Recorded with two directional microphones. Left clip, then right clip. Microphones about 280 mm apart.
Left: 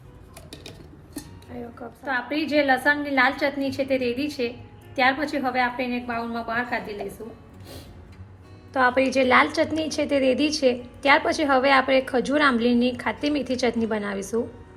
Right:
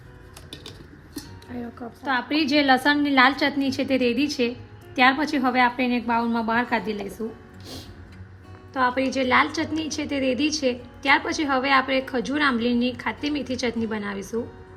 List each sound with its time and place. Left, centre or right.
1.5 s a woman's voice: right
8.7 s a woman's voice: centre